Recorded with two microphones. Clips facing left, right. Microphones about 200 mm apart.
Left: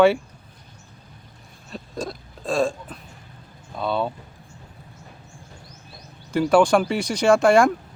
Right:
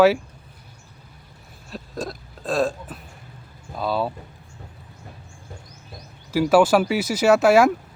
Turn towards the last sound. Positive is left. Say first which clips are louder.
# right 1 dB
turn(degrees=-5)  # may be behind; listen again after turning